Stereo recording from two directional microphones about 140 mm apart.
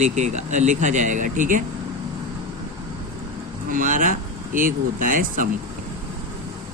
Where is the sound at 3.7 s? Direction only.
75° right (ahead or behind).